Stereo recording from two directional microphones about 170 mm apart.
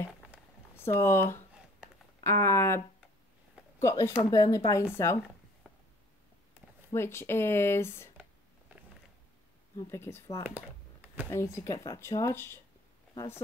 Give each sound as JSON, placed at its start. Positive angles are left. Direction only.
{"t": 0.7, "sound": "speech", "side_deg": 15}
{"t": 3.8, "sound": "speech", "side_deg": 15}
{"t": 6.9, "sound": "speech", "side_deg": 15}
{"t": 9.8, "sound": "speech", "side_deg": 15}
{"t": 10.4, "sound": "computer keyboard", "side_deg": -10}
{"t": 11.2, "sound": "speech", "side_deg": 15}